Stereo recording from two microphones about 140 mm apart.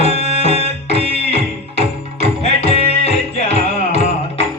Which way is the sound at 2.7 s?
50° left (ahead or behind).